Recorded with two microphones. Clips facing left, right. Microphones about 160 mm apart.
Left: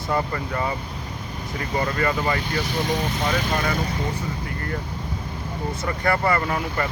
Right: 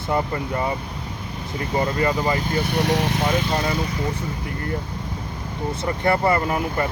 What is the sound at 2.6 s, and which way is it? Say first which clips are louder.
Speech: right 4 dB; 70° right (ahead or behind).